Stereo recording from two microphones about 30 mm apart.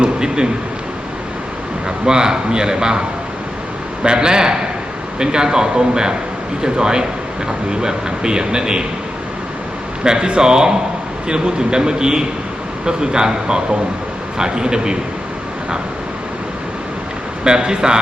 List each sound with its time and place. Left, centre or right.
0.0 s a sound: right
2.0 s speech: right
4.0 s speech: right
10.0 s speech: right
17.4 s speech: right